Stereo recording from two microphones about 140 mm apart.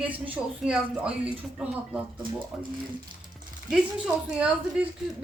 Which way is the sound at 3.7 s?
5° right (ahead or behind).